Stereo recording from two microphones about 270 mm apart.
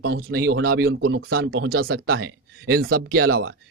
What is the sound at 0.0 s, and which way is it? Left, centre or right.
Speech, right.